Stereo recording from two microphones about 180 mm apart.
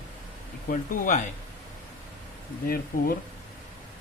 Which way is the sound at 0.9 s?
45° left (ahead or behind).